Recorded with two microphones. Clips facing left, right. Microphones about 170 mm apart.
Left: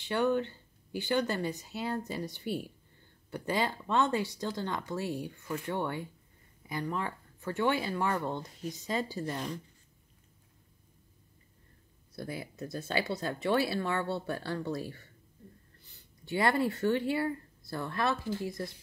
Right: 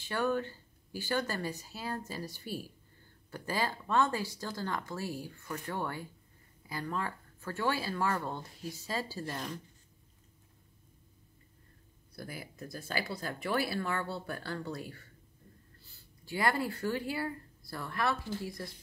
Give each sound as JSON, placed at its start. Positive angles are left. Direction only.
{"t": 0.0, "sound": "speech", "side_deg": 20}
{"t": 12.2, "sound": "speech", "side_deg": 25}